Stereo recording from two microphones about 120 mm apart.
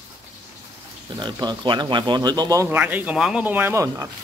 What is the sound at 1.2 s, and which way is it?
Speech, 40° right (ahead or behind).